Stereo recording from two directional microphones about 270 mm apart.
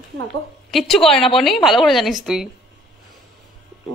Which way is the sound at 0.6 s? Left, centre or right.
Centre.